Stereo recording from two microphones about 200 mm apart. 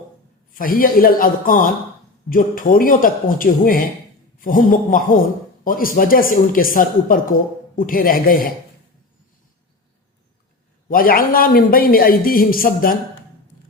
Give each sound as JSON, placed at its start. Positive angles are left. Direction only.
{"t": 0.6, "sound": "a man's voice", "side_deg": 45}
{"t": 10.8, "sound": "a man's voice", "side_deg": 45}